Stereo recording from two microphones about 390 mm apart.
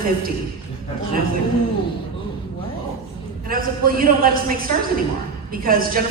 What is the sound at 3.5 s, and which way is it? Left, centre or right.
A man's voice, right.